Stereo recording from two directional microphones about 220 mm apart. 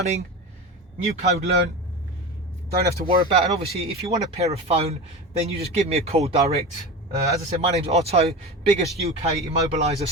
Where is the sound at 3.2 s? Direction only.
25° right (ahead or behind).